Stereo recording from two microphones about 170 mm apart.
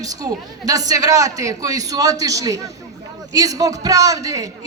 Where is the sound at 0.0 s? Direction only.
20° right (ahead or behind).